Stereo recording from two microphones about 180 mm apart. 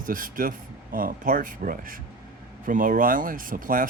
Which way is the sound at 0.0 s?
50° right (ahead or behind).